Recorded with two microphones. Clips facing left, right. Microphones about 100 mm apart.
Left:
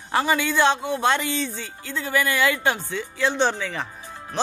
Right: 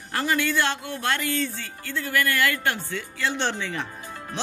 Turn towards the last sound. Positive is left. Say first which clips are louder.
# left 4 dB
turn(degrees=0)  # may be behind; listen again after turning